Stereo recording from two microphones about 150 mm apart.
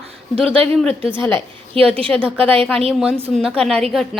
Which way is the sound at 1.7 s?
40° right (ahead or behind).